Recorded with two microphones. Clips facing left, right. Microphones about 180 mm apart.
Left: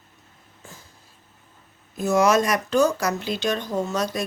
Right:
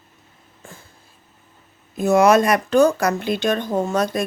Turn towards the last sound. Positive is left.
turn(degrees=-55)  # may be behind; listen again after turning